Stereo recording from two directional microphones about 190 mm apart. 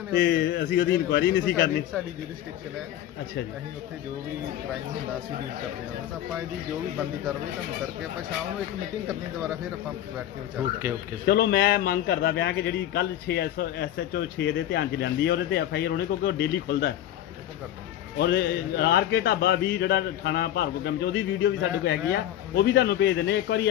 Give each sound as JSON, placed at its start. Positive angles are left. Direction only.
{"t": 0.1, "sound": "a man's voice", "side_deg": 55}
{"t": 11.2, "sound": "a man's voice", "side_deg": 55}
{"t": 18.2, "sound": "a man's voice", "side_deg": 60}